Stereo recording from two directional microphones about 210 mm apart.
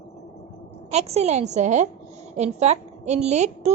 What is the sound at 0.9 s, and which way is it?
A woman's voice, 30° right (ahead or behind).